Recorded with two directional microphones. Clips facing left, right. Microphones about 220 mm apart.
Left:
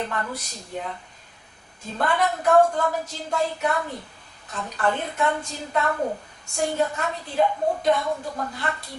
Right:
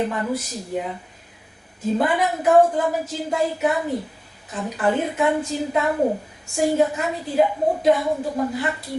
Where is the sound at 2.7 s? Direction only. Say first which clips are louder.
Right 3 dB; 15° right (ahead or behind).